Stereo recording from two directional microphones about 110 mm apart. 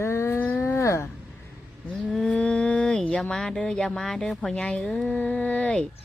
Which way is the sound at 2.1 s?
10° left (ahead or behind).